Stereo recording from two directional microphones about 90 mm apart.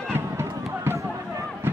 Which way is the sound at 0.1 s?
25° right (ahead or behind).